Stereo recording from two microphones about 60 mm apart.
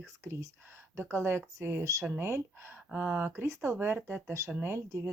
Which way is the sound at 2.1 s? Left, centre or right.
Right.